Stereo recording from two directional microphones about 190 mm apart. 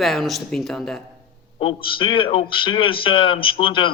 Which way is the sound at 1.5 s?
25° left (ahead or behind).